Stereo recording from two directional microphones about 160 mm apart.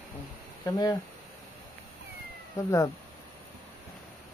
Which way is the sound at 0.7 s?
25° left (ahead or behind).